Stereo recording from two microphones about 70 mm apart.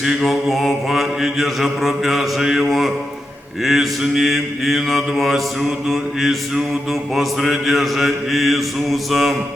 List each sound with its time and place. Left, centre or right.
0.0 s mantra: centre